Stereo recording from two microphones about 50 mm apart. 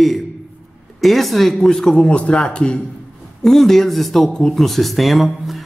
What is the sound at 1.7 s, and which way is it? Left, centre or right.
A man's voice, centre.